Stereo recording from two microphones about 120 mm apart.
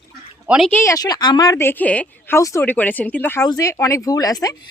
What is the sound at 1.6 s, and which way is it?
Speech, 15° left (ahead or behind).